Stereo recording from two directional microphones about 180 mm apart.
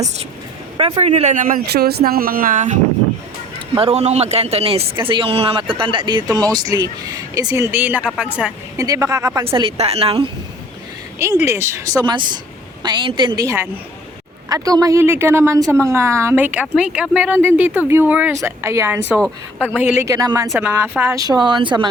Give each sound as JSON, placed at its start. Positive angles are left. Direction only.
{"t": 0.8, "sound": "a woman's voice", "side_deg": -35}
{"t": 3.8, "sound": "speech", "side_deg": -35}
{"t": 8.8, "sound": "speech", "side_deg": -20}
{"t": 9.5, "sound": "a woman's voice", "side_deg": -30}
{"t": 11.2, "sound": "speech", "side_deg": -15}
{"t": 19.2, "sound": "speech", "side_deg": 5}
{"t": 19.7, "sound": "speech", "side_deg": -10}
{"t": 20.5, "sound": "speech", "side_deg": -10}